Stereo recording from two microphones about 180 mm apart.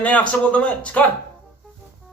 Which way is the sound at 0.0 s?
10° left (ahead or behind).